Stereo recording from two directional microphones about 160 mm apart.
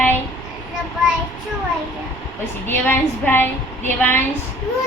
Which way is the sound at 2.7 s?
15° left (ahead or behind).